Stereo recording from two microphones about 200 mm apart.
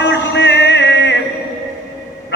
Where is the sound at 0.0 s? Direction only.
60° left (ahead or behind).